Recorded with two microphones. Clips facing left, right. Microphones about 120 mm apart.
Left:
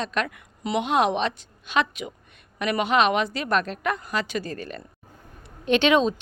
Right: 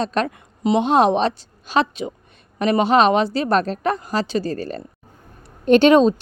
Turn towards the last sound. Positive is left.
turn(degrees=-35)  # may be behind; listen again after turning